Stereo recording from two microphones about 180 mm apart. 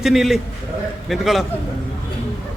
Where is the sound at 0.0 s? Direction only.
Centre (ahead or behind).